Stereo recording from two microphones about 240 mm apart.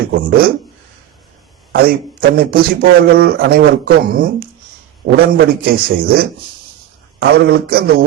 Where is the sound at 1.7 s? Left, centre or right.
Right.